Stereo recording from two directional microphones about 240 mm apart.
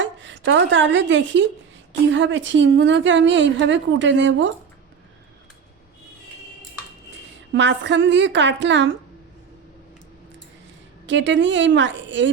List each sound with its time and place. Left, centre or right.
0.0 s a woman's voice: right
7.5 s a woman's voice: right
11.0 s a woman's voice: right